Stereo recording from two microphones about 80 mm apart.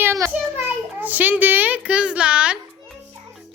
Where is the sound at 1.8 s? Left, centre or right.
Centre.